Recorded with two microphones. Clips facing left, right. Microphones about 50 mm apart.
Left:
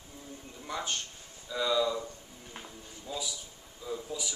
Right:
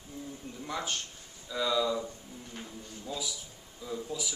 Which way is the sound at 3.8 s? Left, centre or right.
Centre.